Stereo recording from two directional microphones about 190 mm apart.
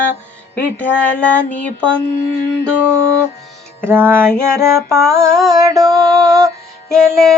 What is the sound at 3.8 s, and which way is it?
Female singing, 10° right (ahead or behind).